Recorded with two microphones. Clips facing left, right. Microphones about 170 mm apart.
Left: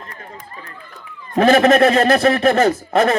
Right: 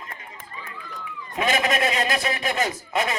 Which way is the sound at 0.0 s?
40° left (ahead or behind).